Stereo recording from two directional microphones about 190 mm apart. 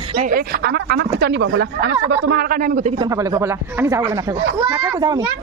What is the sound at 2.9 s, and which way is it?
A man's voice, 20° right (ahead or behind).